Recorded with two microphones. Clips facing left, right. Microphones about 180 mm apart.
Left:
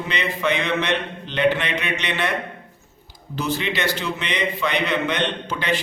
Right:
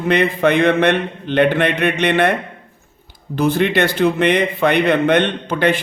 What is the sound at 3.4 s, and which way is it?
A man's voice, 55° right (ahead or behind).